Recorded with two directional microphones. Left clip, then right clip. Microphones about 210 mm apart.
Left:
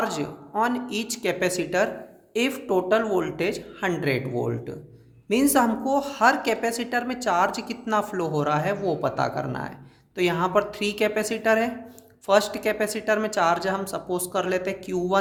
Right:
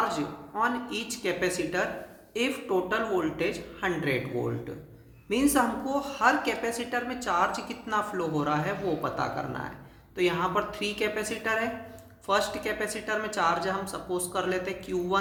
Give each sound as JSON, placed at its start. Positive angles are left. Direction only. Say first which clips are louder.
{"t": 0.0, "sound": "a woman's voice", "louder": "left 1 dB", "side_deg": 50}